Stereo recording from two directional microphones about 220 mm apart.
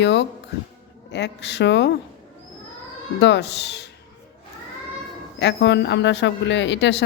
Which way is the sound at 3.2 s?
50° left (ahead or behind).